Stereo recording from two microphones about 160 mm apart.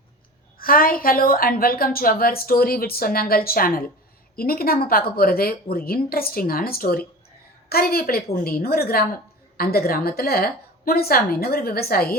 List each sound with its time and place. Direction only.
0.6 s a woman's voice: 65° left (ahead or behind)